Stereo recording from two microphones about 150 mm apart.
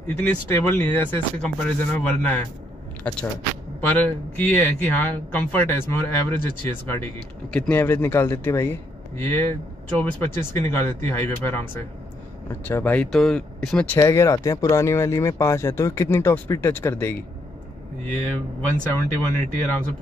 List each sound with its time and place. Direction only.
0.2 s a man's voice: 15° left (ahead or behind)
4.4 s a man's voice: 10° left (ahead or behind)
7.5 s a man's voice: 10° left (ahead or behind)
13.9 s a man's voice: 20° left (ahead or behind)